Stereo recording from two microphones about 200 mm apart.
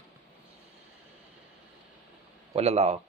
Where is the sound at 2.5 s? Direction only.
30° right (ahead or behind).